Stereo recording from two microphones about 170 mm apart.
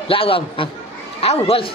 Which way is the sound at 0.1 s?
30° left (ahead or behind).